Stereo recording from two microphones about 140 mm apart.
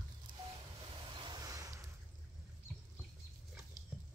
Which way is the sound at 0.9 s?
35° right (ahead or behind).